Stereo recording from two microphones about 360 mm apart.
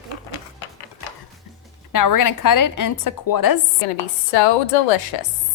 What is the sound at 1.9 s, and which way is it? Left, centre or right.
A woman's voice, left.